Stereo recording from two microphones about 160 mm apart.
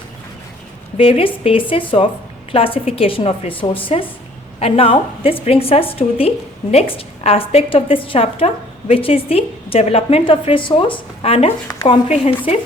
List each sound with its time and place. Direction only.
0.9 s a woman's voice: 35° left (ahead or behind)